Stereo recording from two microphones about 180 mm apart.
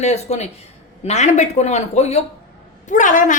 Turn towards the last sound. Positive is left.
turn(degrees=45)  # may be behind; listen again after turning